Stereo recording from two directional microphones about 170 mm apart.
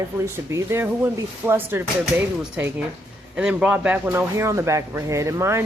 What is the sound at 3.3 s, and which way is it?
Speech, 5° right (ahead or behind).